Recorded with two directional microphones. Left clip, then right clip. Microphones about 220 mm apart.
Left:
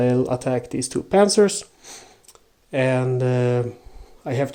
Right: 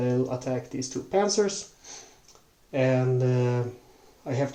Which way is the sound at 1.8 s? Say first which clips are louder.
Left 4 dB; 45° left (ahead or behind).